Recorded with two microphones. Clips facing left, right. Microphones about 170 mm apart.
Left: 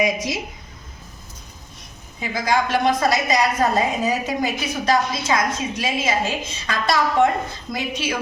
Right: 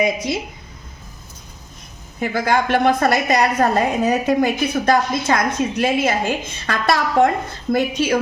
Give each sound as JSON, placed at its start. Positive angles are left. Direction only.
{"t": 2.2, "sound": "a woman's voice", "side_deg": -60}